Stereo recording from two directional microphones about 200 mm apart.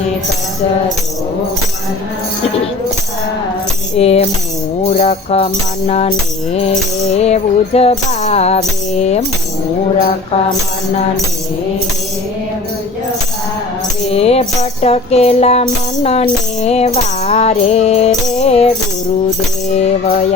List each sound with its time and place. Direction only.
3.9 s music: 30° left (ahead or behind)
14.1 s music: 30° left (ahead or behind)